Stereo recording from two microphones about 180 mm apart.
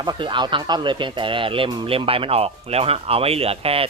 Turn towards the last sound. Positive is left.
turn(degrees=-35)  # may be behind; listen again after turning